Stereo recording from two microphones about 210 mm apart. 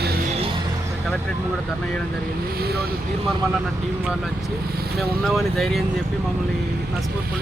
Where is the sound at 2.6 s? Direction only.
50° right (ahead or behind).